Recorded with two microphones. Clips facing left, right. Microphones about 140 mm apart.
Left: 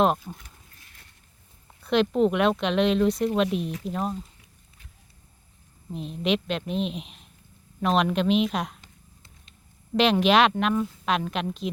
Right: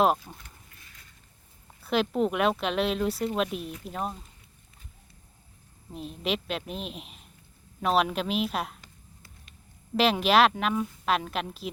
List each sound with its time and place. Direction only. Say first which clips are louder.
0.0 s speech: left 1 dB; 5° right (ahead or behind)
1.8 s speech: left 4 dB; 5° right (ahead or behind)
5.9 s speech: left 5 dB; centre (ahead or behind)
10.0 s speech: left 2 dB; 5° right (ahead or behind)